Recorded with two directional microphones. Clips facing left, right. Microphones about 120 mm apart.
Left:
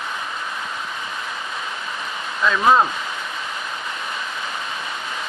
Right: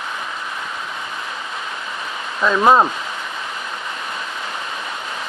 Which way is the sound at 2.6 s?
30° right (ahead or behind).